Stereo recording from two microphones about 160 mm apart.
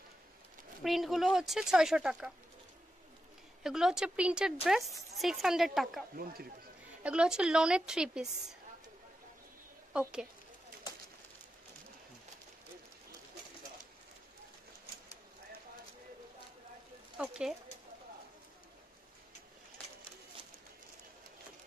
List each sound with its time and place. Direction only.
0.8 s speech: centre (ahead or behind)
3.6 s speech: 5° right (ahead or behind)
6.1 s speech: 65° right (ahead or behind)
7.0 s speech: 5° right (ahead or behind)
17.2 s speech: 5° right (ahead or behind)